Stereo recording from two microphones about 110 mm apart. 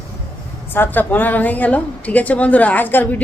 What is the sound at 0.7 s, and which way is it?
A woman's voice, 20° left (ahead or behind).